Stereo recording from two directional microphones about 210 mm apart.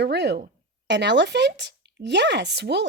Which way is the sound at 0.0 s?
55° right (ahead or behind).